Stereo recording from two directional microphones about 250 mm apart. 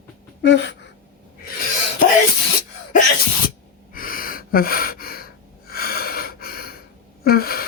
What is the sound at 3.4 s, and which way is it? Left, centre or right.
Gasp, left.